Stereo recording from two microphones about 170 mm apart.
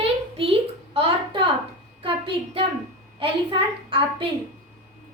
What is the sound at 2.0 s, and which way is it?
Child singing, 30° right (ahead or behind).